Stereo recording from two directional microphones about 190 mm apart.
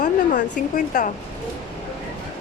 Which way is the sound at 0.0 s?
40° left (ahead or behind).